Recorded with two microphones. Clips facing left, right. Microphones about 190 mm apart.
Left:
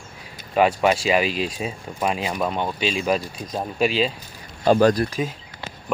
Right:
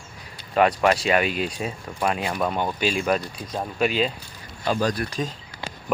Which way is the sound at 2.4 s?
5° right (ahead or behind).